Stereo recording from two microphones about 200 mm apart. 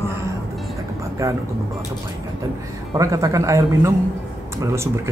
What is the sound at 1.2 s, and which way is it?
Speech, 15° right (ahead or behind).